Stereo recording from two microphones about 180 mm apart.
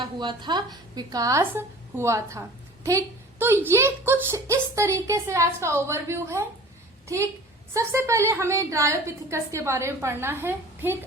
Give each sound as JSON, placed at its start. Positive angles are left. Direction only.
{"t": 0.0, "sound": "a woman's voice", "side_deg": -25}
{"t": 7.7, "sound": "a woman's voice", "side_deg": -15}